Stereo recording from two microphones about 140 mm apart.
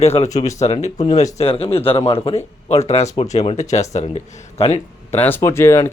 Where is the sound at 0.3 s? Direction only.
50° left (ahead or behind).